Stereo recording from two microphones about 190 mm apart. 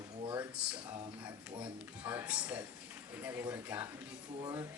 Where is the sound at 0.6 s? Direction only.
5° right (ahead or behind).